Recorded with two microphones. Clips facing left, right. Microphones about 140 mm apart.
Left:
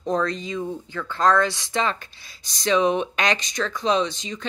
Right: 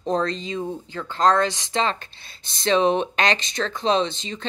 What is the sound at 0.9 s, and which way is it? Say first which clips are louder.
Speech: left 1 dB; 45° right (ahead or behind).